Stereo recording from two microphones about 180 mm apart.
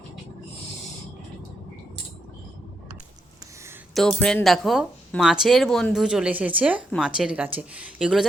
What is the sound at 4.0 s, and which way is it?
Speech, centre (ahead or behind).